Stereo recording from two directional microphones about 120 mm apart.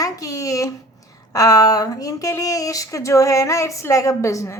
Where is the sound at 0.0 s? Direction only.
30° left (ahead or behind).